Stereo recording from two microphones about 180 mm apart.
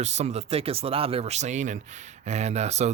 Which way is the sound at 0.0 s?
40° right (ahead or behind).